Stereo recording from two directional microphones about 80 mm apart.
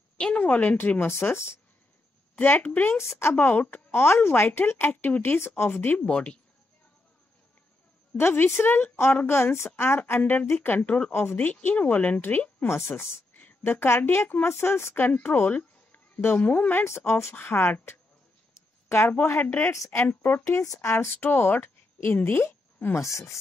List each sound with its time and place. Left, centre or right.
0.2 s a woman's voice: centre
6.0 s speech: centre
8.2 s a woman's voice: left
19.0 s a woman's voice: centre
19.7 s a woman's voice: left
20.0 s a woman's voice: left
20.4 s a woman's voice: left
20.9 s speech: left
23.0 s a woman's voice: left